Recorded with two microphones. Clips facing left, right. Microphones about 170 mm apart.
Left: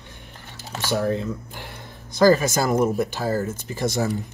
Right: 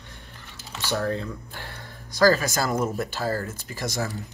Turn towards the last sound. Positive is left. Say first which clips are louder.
# left 6 dB
turn(degrees=20)  # may be behind; listen again after turning